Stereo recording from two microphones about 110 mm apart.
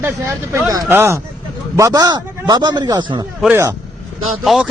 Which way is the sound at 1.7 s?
35° right (ahead or behind).